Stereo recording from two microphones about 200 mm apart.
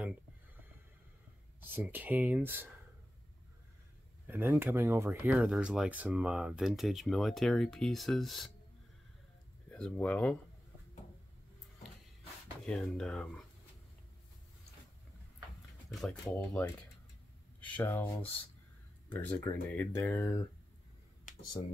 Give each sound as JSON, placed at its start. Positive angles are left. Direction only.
{"t": 1.6, "sound": "speech", "side_deg": -10}
{"t": 4.3, "sound": "speech", "side_deg": -10}
{"t": 9.7, "sound": "speech", "side_deg": 5}
{"t": 12.6, "sound": "speech", "side_deg": 5}
{"t": 15.9, "sound": "speech", "side_deg": 0}